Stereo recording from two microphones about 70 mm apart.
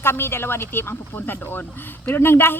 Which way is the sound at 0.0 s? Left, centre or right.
Left.